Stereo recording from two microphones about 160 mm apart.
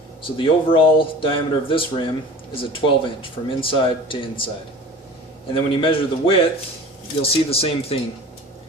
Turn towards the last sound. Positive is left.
turn(degrees=35)  # may be behind; listen again after turning